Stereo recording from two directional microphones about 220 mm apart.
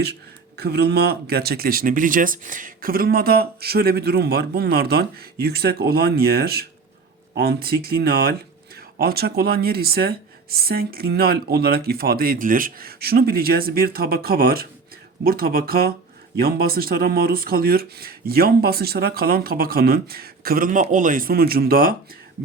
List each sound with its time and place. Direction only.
0.6 s speech: 45° right (ahead or behind)